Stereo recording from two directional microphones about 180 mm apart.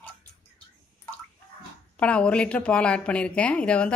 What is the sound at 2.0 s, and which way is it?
Speech, 5° left (ahead or behind).